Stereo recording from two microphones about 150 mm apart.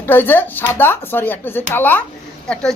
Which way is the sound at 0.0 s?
15° left (ahead or behind).